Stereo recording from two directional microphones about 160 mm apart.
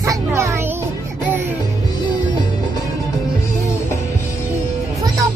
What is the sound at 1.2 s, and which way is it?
Music, 10° right (ahead or behind).